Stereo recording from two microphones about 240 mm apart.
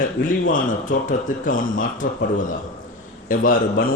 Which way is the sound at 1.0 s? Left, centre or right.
Left.